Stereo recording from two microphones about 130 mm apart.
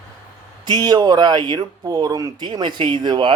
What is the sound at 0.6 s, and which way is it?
Speech, 30° right (ahead or behind).